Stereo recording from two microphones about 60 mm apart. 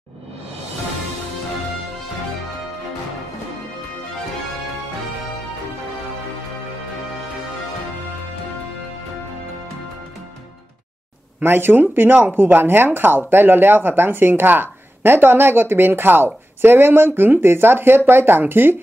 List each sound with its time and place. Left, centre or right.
11.4 s speech: right